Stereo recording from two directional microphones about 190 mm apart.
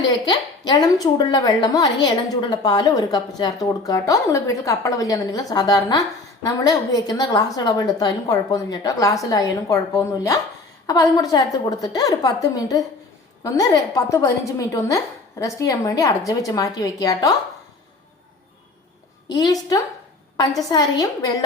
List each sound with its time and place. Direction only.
0.3 s a woman's voice: 20° left (ahead or behind)
19.3 s a woman's voice: 20° left (ahead or behind)